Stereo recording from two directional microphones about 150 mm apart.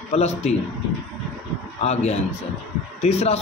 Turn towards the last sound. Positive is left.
turn(degrees=45)  # may be behind; listen again after turning